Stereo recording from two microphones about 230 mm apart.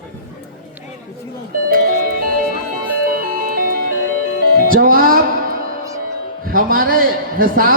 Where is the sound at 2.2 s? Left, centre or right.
Right.